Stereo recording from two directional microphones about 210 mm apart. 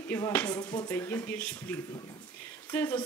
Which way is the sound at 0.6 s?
20° left (ahead or behind).